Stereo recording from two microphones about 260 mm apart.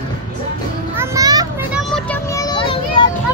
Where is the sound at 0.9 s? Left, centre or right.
Centre.